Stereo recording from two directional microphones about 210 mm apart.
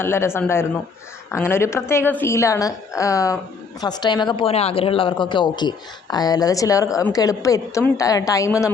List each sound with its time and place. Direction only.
0.0 s a woman's voice: 10° left (ahead or behind)